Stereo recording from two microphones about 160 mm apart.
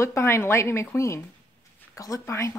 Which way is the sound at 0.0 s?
15° left (ahead or behind).